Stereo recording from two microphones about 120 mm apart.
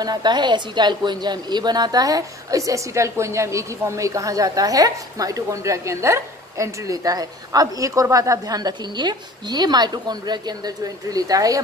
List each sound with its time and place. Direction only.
0.0 s speech: 35° right (ahead or behind)